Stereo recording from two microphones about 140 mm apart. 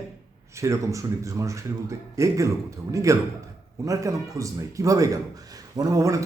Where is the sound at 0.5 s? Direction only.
20° right (ahead or behind).